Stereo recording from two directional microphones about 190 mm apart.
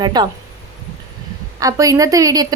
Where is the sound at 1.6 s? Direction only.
20° right (ahead or behind).